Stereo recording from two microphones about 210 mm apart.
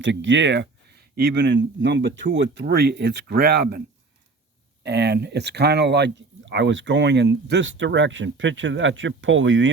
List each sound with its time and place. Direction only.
0.0 s speech: 60° right (ahead or behind)